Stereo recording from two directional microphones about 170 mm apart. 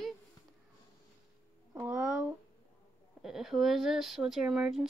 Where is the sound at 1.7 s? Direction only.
10° right (ahead or behind).